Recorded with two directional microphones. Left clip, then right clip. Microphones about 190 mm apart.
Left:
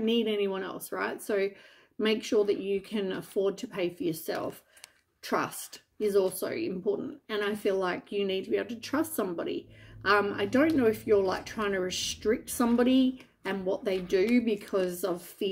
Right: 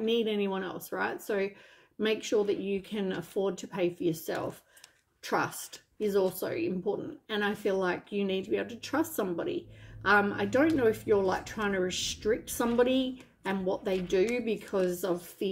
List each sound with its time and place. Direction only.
0.0 s speech: 20° left (ahead or behind)